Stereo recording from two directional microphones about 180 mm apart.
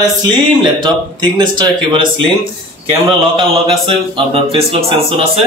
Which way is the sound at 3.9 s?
30° right (ahead or behind).